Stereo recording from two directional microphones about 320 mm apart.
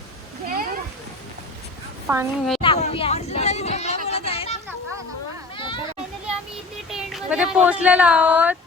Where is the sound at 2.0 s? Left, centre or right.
Centre.